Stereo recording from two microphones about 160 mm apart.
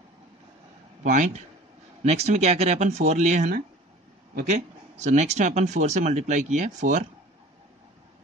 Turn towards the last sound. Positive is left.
turn(degrees=-50)  # may be behind; listen again after turning